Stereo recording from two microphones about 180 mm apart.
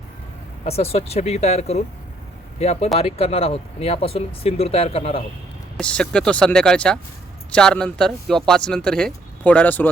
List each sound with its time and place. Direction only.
0.6 s speech: 35° left (ahead or behind)
5.7 s speech: 5° left (ahead or behind)